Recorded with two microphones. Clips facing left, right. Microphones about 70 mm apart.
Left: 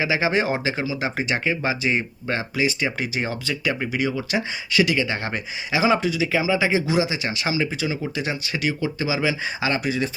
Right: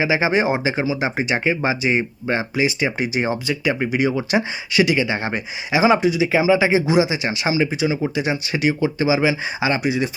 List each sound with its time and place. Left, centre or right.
0.0 s speech: centre